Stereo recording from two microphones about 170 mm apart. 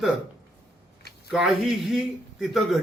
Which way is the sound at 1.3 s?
Centre (ahead or behind).